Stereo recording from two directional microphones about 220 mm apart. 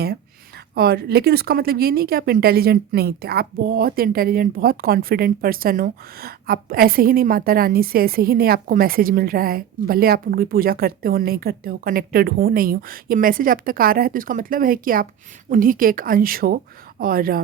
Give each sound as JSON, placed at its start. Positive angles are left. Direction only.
{"t": 0.8, "sound": "speech", "side_deg": -45}